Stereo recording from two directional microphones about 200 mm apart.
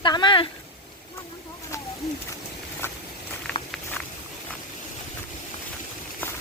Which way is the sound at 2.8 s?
10° left (ahead or behind).